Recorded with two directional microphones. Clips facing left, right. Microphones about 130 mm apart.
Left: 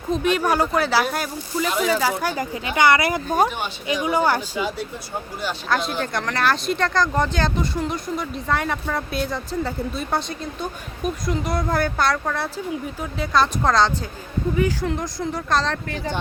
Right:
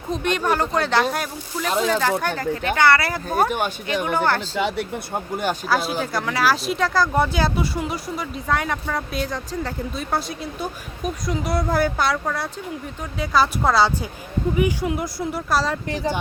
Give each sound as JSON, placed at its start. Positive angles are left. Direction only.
{"t": 0.1, "sound": "speech", "side_deg": 5}
{"t": 4.5, "sound": "speech", "side_deg": -70}
{"t": 5.6, "sound": "speech", "side_deg": -5}